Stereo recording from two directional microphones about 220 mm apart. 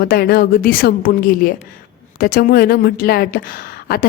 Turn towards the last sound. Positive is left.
turn(degrees=40)  # may be behind; listen again after turning